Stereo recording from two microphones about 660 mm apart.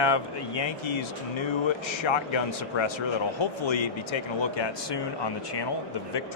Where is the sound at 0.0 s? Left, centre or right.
Left.